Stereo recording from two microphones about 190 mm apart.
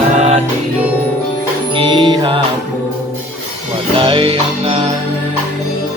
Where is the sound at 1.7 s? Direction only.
25° right (ahead or behind).